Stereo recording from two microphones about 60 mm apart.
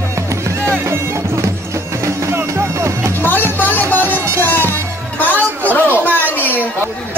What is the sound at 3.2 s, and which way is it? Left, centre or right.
Music, left.